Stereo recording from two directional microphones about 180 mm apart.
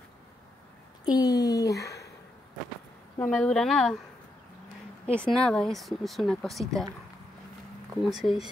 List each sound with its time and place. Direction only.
1.0 s speech: 20° left (ahead or behind)
3.2 s speech: 5° left (ahead or behind)
5.3 s speech: 5° left (ahead or behind)
8.0 s speech: centre (ahead or behind)